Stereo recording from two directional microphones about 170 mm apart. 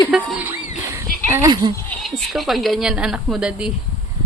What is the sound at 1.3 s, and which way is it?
Speech, 20° right (ahead or behind).